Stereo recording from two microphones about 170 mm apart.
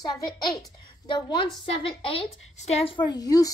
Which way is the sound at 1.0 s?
30° left (ahead or behind).